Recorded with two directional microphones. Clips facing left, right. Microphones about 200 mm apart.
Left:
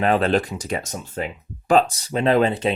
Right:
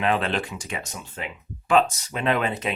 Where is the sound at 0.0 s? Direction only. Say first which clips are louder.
Left 5 dB; 40° left (ahead or behind).